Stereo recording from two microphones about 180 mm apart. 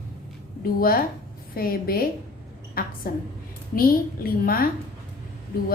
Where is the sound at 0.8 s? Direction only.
55° left (ahead or behind).